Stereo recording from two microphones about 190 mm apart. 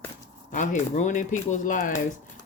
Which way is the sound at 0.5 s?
40° left (ahead or behind).